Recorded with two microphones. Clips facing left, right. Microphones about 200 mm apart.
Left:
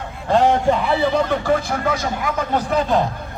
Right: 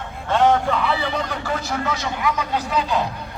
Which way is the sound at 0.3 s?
40° left (ahead or behind).